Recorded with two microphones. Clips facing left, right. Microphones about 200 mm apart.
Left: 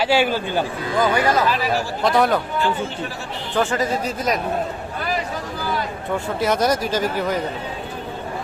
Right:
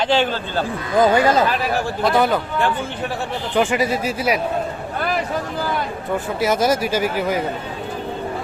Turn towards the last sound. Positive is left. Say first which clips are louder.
# right 1 dB
turn(degrees=-10)  # may be behind; listen again after turning